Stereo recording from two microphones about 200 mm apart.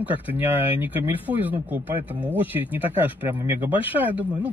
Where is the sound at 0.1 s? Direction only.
10° right (ahead or behind).